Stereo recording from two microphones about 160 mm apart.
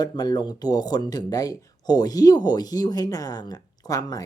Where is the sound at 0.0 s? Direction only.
25° left (ahead or behind).